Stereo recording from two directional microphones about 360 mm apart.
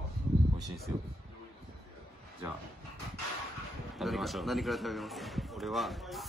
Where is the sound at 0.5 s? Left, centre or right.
Centre.